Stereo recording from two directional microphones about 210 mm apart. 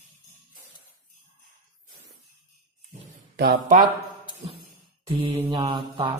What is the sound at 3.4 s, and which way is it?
Speech, 45° right (ahead or behind).